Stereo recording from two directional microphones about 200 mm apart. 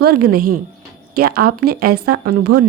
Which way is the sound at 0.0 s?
50° right (ahead or behind).